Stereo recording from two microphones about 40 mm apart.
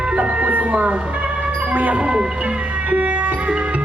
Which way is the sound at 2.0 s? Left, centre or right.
Right.